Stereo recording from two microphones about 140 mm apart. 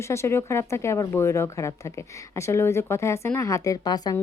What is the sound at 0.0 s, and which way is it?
Speech, 20° left (ahead or behind).